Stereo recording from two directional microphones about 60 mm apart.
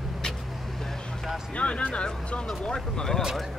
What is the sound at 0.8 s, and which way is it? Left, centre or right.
Vehicle, centre.